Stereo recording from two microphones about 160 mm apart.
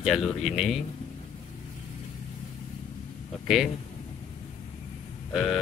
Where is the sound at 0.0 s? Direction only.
Centre (ahead or behind).